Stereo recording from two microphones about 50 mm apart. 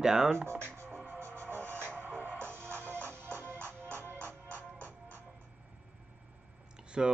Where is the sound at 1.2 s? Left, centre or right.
Right.